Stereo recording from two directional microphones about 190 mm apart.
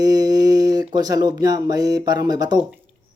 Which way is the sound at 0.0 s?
20° right (ahead or behind).